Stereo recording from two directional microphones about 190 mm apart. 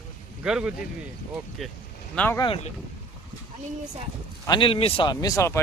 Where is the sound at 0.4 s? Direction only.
5° right (ahead or behind).